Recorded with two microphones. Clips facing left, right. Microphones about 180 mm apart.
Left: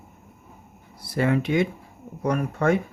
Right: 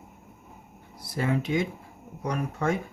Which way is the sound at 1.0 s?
70° left (ahead or behind).